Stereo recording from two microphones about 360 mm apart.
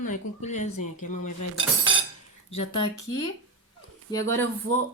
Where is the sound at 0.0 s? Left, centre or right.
Centre.